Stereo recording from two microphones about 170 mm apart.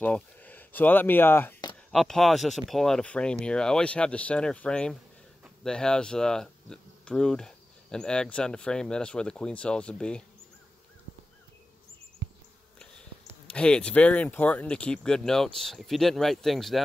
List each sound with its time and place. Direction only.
0.0 s speech: 10° left (ahead or behind)
1.9 s speech: centre (ahead or behind)
12.2 s bee: 90° right
13.5 s speech: 5° left (ahead or behind)